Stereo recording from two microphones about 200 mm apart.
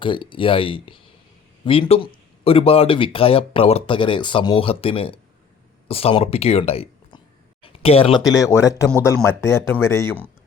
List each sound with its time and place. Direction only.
0.0 s speech: 25° left (ahead or behind)
7.6 s a sound: 30° left (ahead or behind)
8.1 s speech: centre (ahead or behind)
8.4 s speech: 15° left (ahead or behind)